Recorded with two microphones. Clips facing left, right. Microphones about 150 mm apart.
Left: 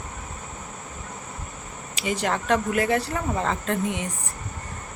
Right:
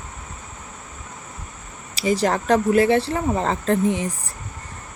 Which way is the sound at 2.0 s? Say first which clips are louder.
Right 6 dB; 35° right (ahead or behind).